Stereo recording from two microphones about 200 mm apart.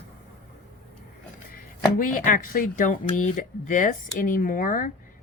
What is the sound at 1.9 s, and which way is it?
Speech, 45° left (ahead or behind).